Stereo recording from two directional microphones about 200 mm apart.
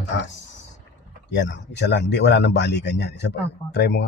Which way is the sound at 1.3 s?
60° left (ahead or behind).